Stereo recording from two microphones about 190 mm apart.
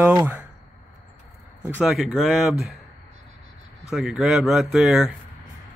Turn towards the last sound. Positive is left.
turn(degrees=0)  # may be behind; listen again after turning